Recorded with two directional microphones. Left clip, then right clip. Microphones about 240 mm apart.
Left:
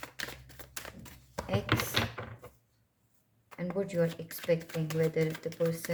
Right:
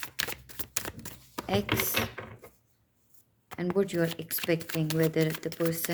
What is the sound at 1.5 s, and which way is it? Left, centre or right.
Speech, right.